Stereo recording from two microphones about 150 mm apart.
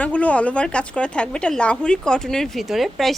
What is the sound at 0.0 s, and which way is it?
A woman's voice, 10° left (ahead or behind).